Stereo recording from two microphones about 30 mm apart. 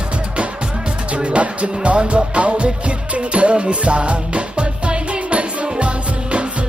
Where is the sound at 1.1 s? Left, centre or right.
Right.